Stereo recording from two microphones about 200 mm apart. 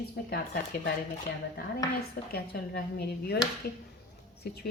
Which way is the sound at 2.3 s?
50° left (ahead or behind).